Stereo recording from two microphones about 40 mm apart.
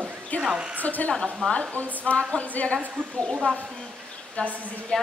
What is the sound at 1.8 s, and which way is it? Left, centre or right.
A woman's voice, left.